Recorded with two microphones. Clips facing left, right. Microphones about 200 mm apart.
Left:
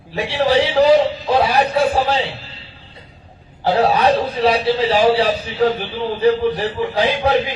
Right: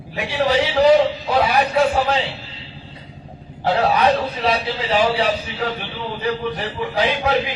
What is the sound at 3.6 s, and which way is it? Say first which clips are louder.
A man's voice: left 2 dB; 30° left (ahead or behind).